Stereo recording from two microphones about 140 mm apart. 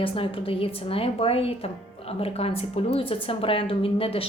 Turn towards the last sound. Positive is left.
turn(degrees=40)  # may be behind; listen again after turning